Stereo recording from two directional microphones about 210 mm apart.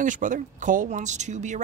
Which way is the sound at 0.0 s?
35° right (ahead or behind).